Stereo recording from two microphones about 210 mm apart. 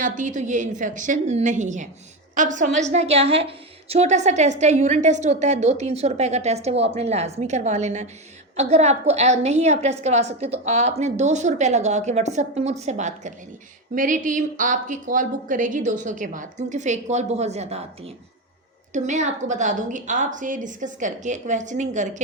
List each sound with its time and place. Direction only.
0.0 s a woman's voice: 35° right (ahead or behind)